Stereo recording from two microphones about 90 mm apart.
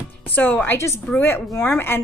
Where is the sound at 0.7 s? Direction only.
30° left (ahead or behind).